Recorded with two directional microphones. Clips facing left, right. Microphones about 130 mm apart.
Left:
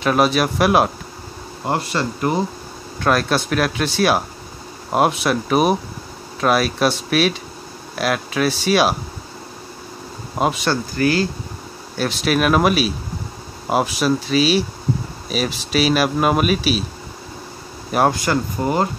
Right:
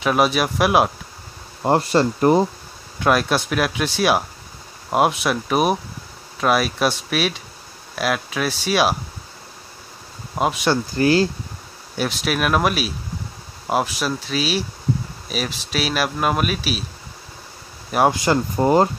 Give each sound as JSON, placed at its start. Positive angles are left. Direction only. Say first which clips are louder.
{"t": 0.0, "sound": "speech", "louder": "left 2 dB", "side_deg": -5}
{"t": 1.6, "sound": "speech", "louder": "right 5 dB", "side_deg": -35}
{"t": 3.0, "sound": "speech", "louder": "even", "side_deg": -10}
{"t": 10.3, "sound": "speech", "louder": "left 1 dB", "side_deg": 0}
{"t": 10.7, "sound": "speech", "louder": "right 1 dB", "side_deg": -30}
{"t": 12.0, "sound": "speech", "louder": "left 3 dB", "side_deg": 0}
{"t": 18.2, "sound": "speech", "louder": "right 2 dB", "side_deg": -30}